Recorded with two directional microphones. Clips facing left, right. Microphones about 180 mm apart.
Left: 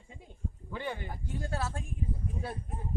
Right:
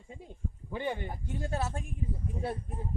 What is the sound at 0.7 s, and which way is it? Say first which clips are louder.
Speech: right 3 dB; 20° right (ahead or behind).